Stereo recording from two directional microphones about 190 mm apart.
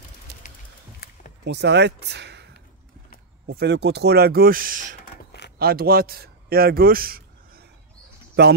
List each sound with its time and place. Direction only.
1.4 s speech: 65° right (ahead or behind)